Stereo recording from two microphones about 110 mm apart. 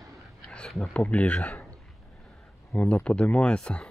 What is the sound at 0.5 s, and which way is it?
Speech, 5° left (ahead or behind).